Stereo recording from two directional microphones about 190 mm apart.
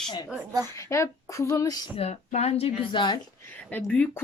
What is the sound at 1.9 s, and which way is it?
Speech, 35° left (ahead or behind).